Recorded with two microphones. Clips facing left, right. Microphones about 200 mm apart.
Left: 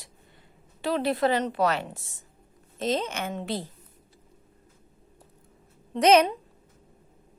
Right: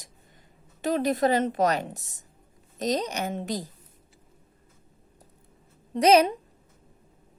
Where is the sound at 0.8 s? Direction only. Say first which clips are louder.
Right 1 dB; 45° right (ahead or behind).